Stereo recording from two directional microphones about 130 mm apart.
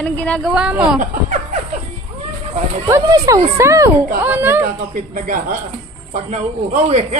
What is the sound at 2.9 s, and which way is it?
A woman's voice, 25° right (ahead or behind).